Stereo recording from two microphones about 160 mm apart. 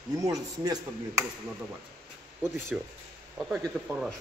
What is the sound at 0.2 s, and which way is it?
Speech, 20° right (ahead or behind).